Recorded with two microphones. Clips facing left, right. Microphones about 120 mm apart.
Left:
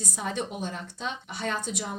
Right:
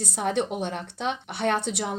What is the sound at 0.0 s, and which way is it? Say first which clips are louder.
A woman's voice: right 6 dB; 65° right (ahead or behind).